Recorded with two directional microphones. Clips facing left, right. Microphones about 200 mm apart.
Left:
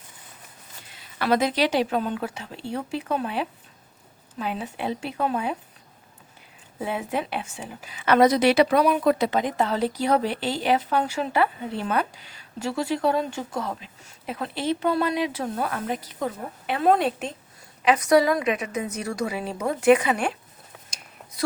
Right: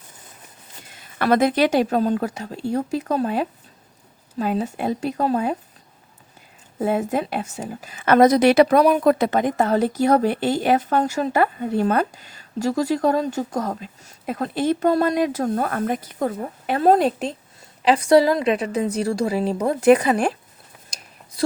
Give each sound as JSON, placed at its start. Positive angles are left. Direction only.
{"t": 0.9, "sound": "a woman's voice", "side_deg": -50}
{"t": 6.7, "sound": "a woman's voice", "side_deg": -45}